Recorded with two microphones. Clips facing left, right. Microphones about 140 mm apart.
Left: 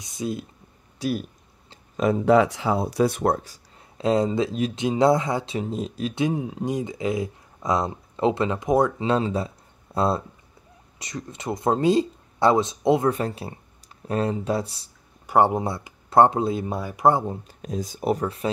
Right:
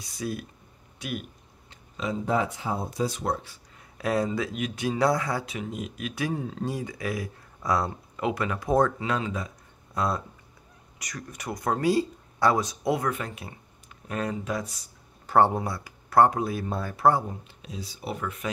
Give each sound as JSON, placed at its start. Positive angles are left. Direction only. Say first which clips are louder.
{"t": 0.0, "sound": "speech", "louder": "left 4 dB", "side_deg": 20}
{"t": 0.9, "sound": "speech", "louder": "left 8 dB", "side_deg": 35}
{"t": 2.0, "sound": "speech", "louder": "left 9 dB", "side_deg": 65}
{"t": 4.0, "sound": "speech", "louder": "left 5 dB", "side_deg": 25}
{"t": 6.2, "sound": "speech", "louder": "left 4 dB", "side_deg": 15}
{"t": 9.0, "sound": "speech", "louder": "left 6 dB", "side_deg": 30}
{"t": 15.2, "sound": "speech", "louder": "left 2 dB", "side_deg": 15}
{"t": 17.5, "sound": "speech", "louder": "left 9 dB", "side_deg": 45}